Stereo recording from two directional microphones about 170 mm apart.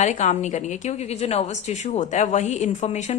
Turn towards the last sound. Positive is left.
turn(degrees=45)  # may be behind; listen again after turning